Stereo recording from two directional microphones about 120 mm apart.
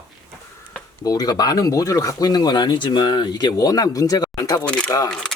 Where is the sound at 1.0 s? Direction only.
30° left (ahead or behind).